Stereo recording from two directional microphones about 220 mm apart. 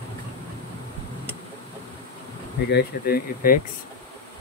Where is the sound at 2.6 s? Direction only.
45° left (ahead or behind).